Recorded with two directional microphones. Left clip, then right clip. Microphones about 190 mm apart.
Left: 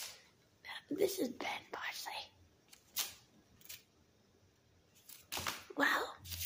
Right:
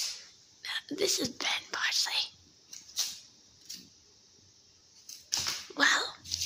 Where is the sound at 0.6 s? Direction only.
Centre (ahead or behind).